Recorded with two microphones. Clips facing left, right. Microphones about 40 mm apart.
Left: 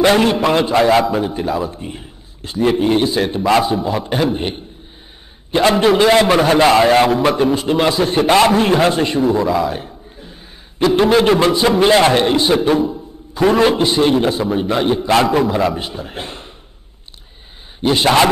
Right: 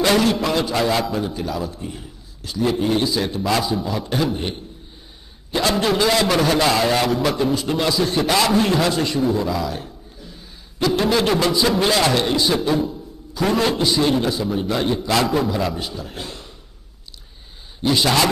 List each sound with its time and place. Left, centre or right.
0.0 s a man's voice: left
17.8 s a man's voice: left